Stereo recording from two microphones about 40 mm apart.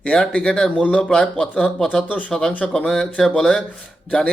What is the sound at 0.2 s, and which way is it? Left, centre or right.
Speech, left.